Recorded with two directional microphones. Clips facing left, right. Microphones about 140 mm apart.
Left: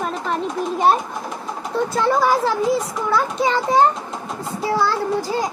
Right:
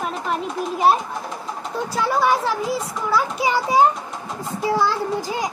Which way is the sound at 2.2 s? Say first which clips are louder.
Left 2 dB; centre (ahead or behind).